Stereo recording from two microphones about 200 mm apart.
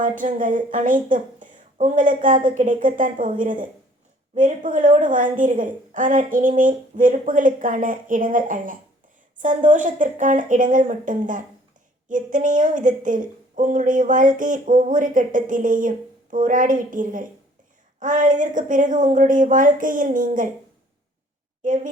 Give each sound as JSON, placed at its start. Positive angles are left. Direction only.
{"t": 0.0, "sound": "a woman's voice", "side_deg": -40}
{"t": 21.6, "sound": "a woman's voice", "side_deg": -40}